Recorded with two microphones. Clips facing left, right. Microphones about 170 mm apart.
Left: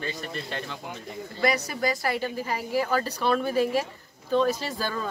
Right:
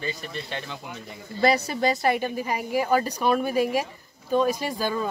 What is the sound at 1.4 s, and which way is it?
A woman's voice, 25° right (ahead or behind).